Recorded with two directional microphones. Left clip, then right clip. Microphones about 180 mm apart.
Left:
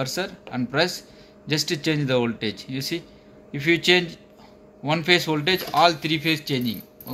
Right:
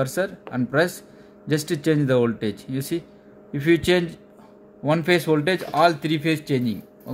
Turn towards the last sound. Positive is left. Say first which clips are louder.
# right 1 dB
turn(degrees=-60)  # may be behind; listen again after turning